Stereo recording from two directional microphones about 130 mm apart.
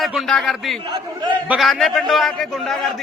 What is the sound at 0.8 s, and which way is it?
Speech, 40° right (ahead or behind).